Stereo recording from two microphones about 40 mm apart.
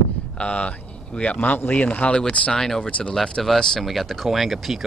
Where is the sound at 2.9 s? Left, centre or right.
Left.